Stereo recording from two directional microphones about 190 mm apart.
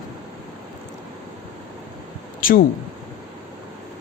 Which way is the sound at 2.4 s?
45° left (ahead or behind).